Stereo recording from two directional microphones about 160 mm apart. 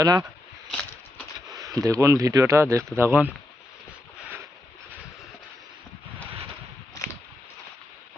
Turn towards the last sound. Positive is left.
turn(degrees=20)  # may be behind; listen again after turning